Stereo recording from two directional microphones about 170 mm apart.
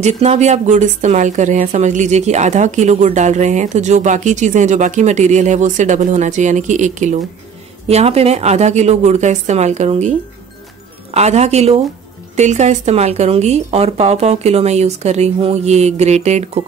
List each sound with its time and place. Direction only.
0.0 s a woman's voice: 40° right (ahead or behind)
11.1 s a woman's voice: 40° right (ahead or behind)